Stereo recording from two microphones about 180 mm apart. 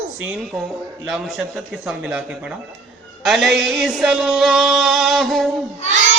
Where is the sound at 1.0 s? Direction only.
Centre (ahead or behind).